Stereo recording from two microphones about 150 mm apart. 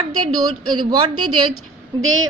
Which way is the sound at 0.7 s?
30° right (ahead or behind).